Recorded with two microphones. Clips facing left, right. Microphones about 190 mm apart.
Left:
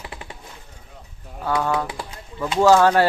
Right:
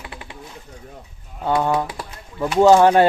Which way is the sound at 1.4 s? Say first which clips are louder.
Right 3 dB; 25° right (ahead or behind).